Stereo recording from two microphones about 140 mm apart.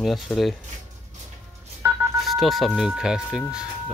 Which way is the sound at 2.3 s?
Centre (ahead or behind).